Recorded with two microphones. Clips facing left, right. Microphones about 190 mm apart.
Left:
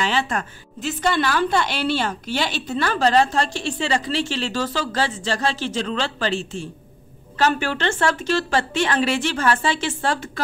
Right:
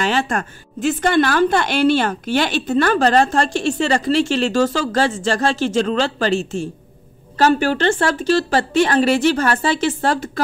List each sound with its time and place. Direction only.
0.0 s a woman's voice: 45° right (ahead or behind)